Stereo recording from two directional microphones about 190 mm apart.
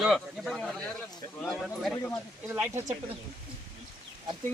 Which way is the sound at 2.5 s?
10° right (ahead or behind).